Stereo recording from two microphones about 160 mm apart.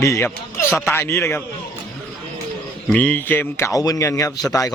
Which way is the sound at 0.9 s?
15° left (ahead or behind).